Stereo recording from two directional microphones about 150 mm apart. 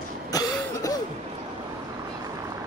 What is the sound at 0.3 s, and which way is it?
Cough, 25° left (ahead or behind).